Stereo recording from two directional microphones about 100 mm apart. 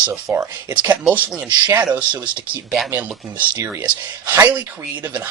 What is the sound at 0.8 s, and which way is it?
Speech, 15° right (ahead or behind).